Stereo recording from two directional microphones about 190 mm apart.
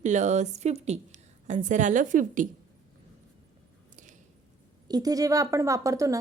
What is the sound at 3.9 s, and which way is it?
Squish, 40° right (ahead or behind).